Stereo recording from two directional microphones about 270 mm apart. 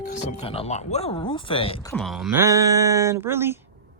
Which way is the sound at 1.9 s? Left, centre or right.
Centre.